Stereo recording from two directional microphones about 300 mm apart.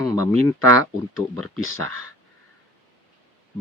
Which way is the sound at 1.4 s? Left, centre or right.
Centre.